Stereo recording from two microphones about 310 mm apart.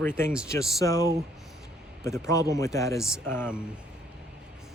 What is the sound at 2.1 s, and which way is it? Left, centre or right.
Speech, centre.